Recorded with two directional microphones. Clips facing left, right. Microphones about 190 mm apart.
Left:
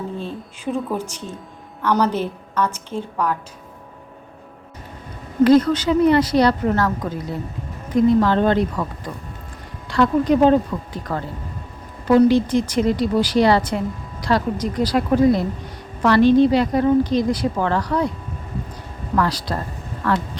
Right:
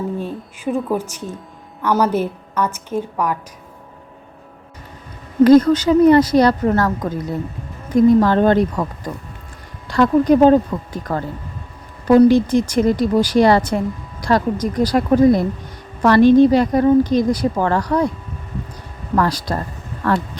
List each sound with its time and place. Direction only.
0.2 s a sound: 10° right (ahead or behind)
1.8 s a woman's voice: 10° right (ahead or behind)
5.4 s a woman's voice: 45° right (ahead or behind)
19.1 s a woman's voice: 45° right (ahead or behind)